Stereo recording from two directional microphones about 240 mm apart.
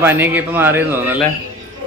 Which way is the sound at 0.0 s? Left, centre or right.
Centre.